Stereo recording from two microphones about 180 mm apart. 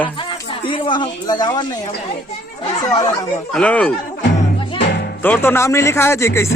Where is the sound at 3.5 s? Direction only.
5° left (ahead or behind).